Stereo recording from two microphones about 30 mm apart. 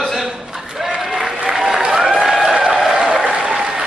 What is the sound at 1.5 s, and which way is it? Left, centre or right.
Applause, centre.